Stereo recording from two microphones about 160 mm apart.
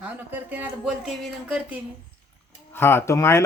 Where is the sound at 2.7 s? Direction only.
15° left (ahead or behind).